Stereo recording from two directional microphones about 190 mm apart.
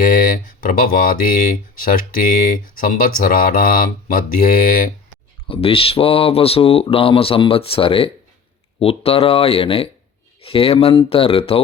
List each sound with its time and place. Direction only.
0.0 s speech: 45° left (ahead or behind)
2.5 s speech: 45° left (ahead or behind)
5.5 s speech: 30° left (ahead or behind)